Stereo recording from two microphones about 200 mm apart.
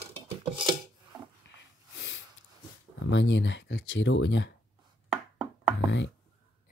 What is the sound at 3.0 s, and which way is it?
Speech, 65° left (ahead or behind).